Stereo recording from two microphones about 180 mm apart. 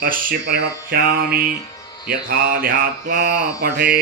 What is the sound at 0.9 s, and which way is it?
Mantra, 60° right (ahead or behind).